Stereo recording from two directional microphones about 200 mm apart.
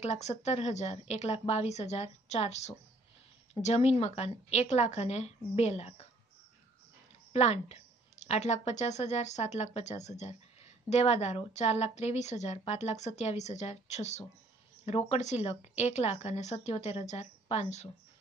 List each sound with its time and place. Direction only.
0.0 s a woman's voice: 35° left (ahead or behind)
7.3 s a woman's voice: 30° left (ahead or behind)